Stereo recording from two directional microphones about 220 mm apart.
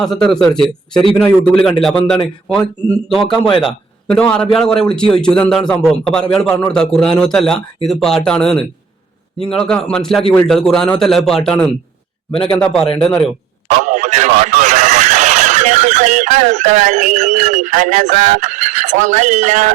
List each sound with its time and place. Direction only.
0.0 s a man's voice: centre (ahead or behind)
3.2 s a man's voice: 25° left (ahead or behind)
4.1 s a man's voice: 5° left (ahead or behind)
13.7 s radio: 35° right (ahead or behind)